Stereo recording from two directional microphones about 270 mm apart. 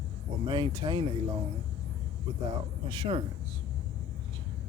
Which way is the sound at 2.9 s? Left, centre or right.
Centre.